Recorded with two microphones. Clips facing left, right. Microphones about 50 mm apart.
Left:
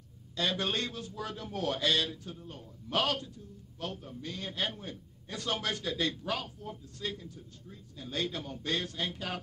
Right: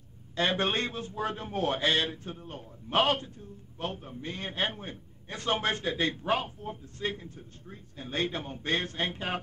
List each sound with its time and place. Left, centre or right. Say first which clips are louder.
0.4 s a man's voice: right 4 dB; right